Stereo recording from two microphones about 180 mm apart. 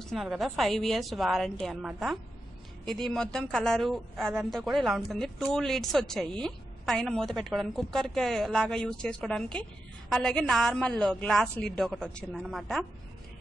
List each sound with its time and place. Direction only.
0.0 s a woman's voice: centre (ahead or behind)